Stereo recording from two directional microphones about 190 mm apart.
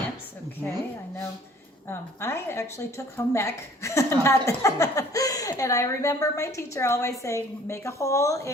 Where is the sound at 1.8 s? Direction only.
15° left (ahead or behind).